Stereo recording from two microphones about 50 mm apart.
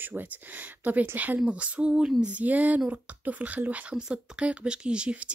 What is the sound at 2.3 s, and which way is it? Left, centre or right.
Speech, right.